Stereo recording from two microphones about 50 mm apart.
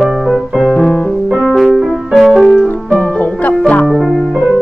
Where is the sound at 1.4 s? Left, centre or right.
Centre.